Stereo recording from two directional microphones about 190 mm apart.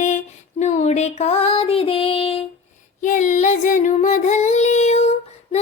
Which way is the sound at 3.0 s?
40° left (ahead or behind).